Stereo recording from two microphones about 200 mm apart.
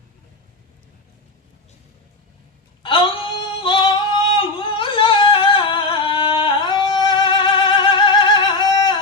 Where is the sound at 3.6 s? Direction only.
25° left (ahead or behind).